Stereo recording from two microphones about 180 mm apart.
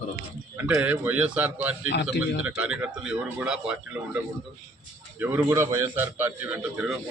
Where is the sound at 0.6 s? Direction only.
10° right (ahead or behind).